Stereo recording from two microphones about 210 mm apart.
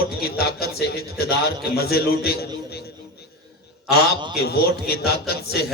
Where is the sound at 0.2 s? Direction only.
50° left (ahead or behind).